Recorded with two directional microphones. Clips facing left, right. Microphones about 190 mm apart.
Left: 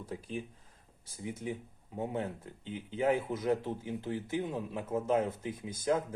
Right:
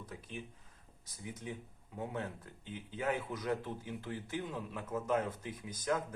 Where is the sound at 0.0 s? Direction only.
30° left (ahead or behind).